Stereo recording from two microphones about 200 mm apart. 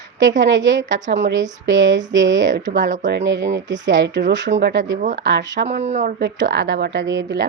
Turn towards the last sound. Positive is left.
turn(degrees=-60)  # may be behind; listen again after turning